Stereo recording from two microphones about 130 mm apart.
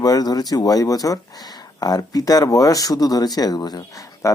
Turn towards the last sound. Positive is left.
turn(degrees=30)  # may be behind; listen again after turning